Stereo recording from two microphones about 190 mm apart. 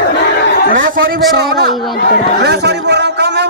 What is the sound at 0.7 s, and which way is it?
Speech, 85° right.